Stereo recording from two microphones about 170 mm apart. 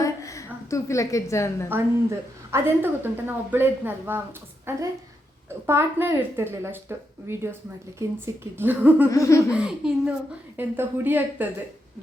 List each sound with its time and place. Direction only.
0.0 s a sound: 20° left (ahead or behind)
1.7 s speech: 15° right (ahead or behind)
9.0 s laughter: 20° left (ahead or behind)
9.5 s speech: 5° right (ahead or behind)